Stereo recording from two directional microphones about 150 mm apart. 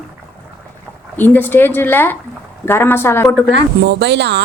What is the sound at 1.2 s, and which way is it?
Speech, 15° left (ahead or behind).